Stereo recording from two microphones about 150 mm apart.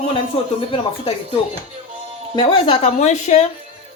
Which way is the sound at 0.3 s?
40° left (ahead or behind).